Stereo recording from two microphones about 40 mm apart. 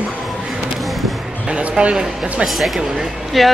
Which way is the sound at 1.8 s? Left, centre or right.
Right.